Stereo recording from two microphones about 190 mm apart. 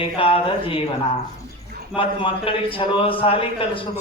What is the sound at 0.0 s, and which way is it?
Speech, 30° left (ahead or behind).